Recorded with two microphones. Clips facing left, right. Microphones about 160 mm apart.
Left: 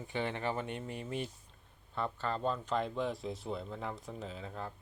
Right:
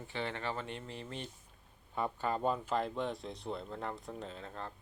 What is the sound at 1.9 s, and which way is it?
Speech, 10° right (ahead or behind).